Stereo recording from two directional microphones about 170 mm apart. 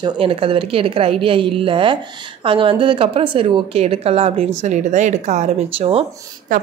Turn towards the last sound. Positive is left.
turn(degrees=-50)  # may be behind; listen again after turning